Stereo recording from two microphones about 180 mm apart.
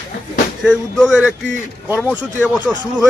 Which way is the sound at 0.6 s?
Centre (ahead or behind).